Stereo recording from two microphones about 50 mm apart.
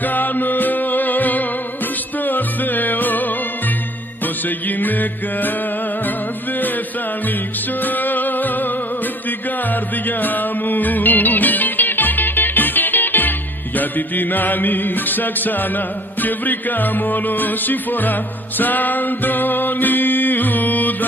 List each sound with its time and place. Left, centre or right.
0.0 s music: left
4.6 s music: left
7.8 s music: left
10.0 s music: left